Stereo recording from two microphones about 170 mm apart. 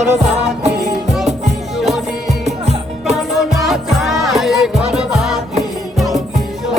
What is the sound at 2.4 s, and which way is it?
Music, 40° right (ahead or behind).